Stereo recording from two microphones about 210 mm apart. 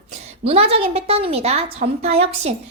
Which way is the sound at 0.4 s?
30° right (ahead or behind).